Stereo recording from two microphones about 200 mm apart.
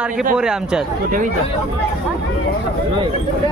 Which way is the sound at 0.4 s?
5° right (ahead or behind).